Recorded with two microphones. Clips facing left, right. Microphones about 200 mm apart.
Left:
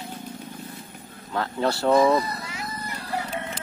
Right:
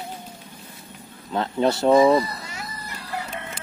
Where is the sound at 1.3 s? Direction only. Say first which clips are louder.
Right 4 dB; 20° right (ahead or behind).